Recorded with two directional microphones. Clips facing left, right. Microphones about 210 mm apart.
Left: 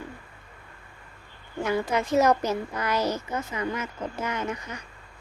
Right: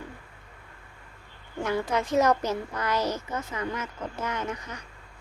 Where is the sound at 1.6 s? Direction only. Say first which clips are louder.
Left 1 dB; 10° left (ahead or behind).